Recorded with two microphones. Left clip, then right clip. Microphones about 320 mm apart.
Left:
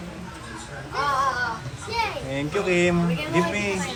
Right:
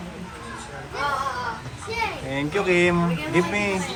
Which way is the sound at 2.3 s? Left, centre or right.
Centre.